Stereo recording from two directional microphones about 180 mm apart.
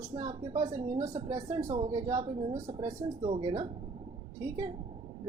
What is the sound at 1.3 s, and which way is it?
Speech, 15° right (ahead or behind).